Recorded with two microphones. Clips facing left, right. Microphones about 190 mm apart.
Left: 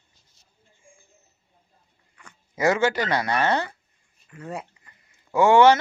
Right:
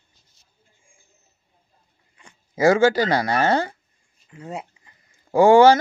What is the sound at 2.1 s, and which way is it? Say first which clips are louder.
Speech: right 4 dB; 30° right (ahead or behind).